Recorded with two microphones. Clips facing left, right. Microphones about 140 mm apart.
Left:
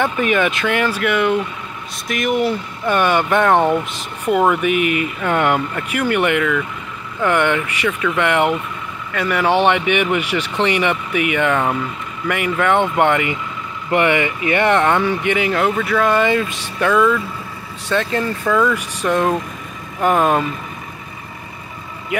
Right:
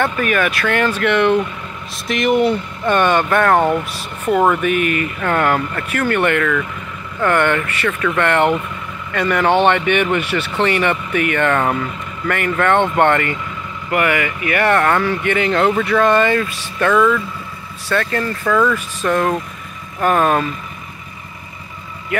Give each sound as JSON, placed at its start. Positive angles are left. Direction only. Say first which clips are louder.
{"t": 0.0, "sound": "speech", "louder": "left 1 dB", "side_deg": 20}
{"t": 13.8, "sound": "speech", "louder": "left 2 dB", "side_deg": 25}